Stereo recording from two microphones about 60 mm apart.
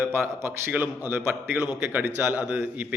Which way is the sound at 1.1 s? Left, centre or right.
Right.